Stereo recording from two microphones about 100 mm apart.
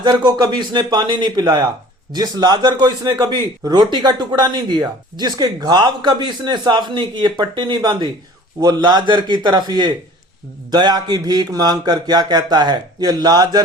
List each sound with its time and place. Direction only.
0.0 s a man's voice: 45° right (ahead or behind)